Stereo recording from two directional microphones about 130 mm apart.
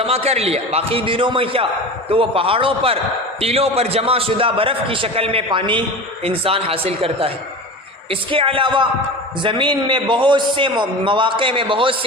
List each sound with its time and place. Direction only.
0.0 s a man's voice: 50° right (ahead or behind)